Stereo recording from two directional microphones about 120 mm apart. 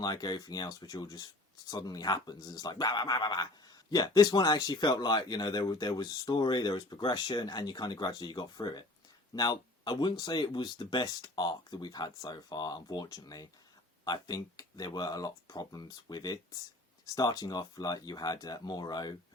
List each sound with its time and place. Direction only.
0.0 s speech: 35° left (ahead or behind)